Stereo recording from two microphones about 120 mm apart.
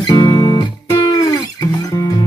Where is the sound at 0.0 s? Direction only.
40° left (ahead or behind).